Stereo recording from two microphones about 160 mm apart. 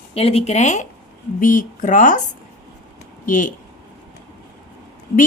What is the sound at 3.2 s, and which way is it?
Speech, 55° left (ahead or behind).